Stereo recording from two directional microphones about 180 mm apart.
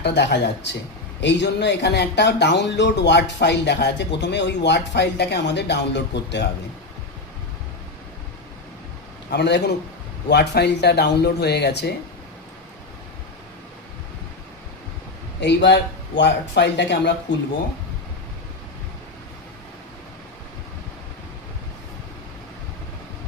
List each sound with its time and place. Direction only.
0.0 s speech: 70° left (ahead or behind)
9.3 s speech: 70° left (ahead or behind)
15.4 s speech: 70° left (ahead or behind)